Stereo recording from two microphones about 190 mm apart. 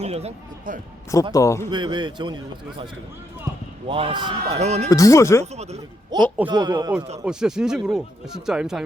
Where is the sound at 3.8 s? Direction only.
25° right (ahead or behind).